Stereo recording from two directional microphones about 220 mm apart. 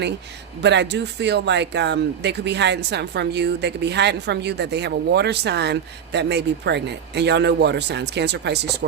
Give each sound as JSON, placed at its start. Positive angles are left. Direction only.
{"t": 0.6, "sound": "speech", "side_deg": -50}